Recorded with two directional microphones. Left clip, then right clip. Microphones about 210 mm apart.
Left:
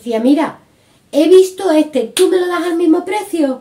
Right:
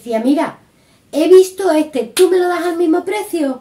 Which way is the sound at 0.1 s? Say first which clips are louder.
Left 2 dB; 5° left (ahead or behind).